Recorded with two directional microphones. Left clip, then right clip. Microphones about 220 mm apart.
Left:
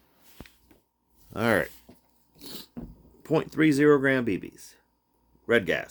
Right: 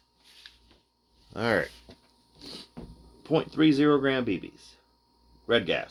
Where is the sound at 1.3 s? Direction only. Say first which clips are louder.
Left 2 dB; 50° left (ahead or behind).